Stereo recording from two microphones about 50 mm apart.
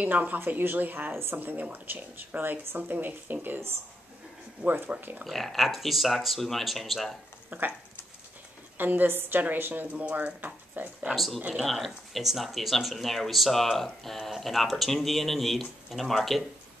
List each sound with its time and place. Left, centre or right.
0.0 s speech: right
4.6 s speech: right
5.2 s speech: centre
7.4 s speech: right
8.7 s a woman's voice: right
9.0 s speech: right
11.5 s speech: centre